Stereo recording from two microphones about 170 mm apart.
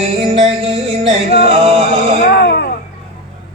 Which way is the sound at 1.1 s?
35° right (ahead or behind).